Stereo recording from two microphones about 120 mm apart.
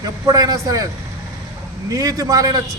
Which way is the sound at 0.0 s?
30° right (ahead or behind).